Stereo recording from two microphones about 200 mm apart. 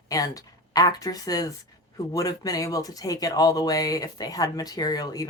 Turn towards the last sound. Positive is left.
turn(degrees=20)  # may be behind; listen again after turning